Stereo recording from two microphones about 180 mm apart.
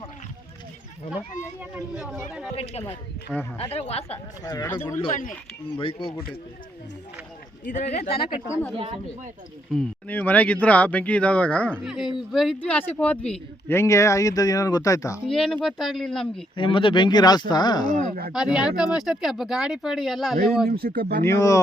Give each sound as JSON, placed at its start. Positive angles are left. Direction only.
{"t": 3.6, "sound": "speech", "side_deg": 35}
{"t": 4.4, "sound": "speech", "side_deg": 20}
{"t": 5.6, "sound": "speech", "side_deg": 30}
{"t": 7.7, "sound": "speech", "side_deg": 40}
{"t": 8.3, "sound": "speech", "side_deg": 15}
{"t": 8.7, "sound": "speech", "side_deg": -30}
{"t": 9.7, "sound": "speech", "side_deg": 5}
{"t": 15.3, "sound": "speech", "side_deg": 0}
{"t": 16.6, "sound": "speech", "side_deg": 30}
{"t": 18.1, "sound": "speech", "side_deg": -55}
{"t": 18.3, "sound": "speech", "side_deg": -5}
{"t": 20.7, "sound": "speech", "side_deg": -65}
{"t": 21.2, "sound": "speech", "side_deg": 15}